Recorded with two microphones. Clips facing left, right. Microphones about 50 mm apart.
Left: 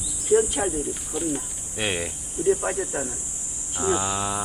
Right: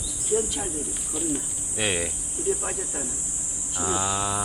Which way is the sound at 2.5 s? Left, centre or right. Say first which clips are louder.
Left 6 dB; left.